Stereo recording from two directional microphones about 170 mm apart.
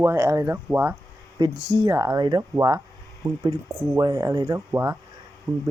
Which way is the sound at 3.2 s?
30° right (ahead or behind).